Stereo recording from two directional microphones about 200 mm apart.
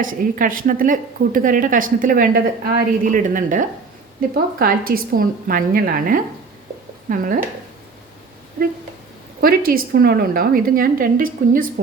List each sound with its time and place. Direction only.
0.0 s a woman's voice: 45° right (ahead or behind)
9.4 s a woman's voice: 45° right (ahead or behind)